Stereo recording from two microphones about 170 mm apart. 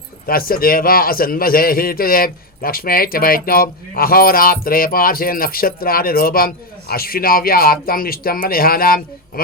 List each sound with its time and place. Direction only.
0.3 s a man's voice: 60° left (ahead or behind)